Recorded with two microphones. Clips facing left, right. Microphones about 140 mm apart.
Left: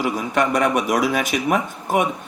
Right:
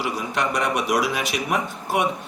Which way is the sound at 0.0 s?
55° left (ahead or behind).